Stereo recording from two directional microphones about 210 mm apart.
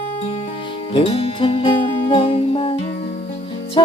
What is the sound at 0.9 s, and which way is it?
Music, 25° left (ahead or behind).